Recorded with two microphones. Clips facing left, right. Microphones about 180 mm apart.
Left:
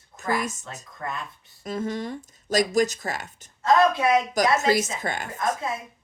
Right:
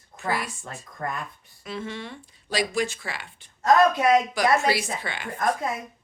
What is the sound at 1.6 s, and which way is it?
Speech, 40° left (ahead or behind).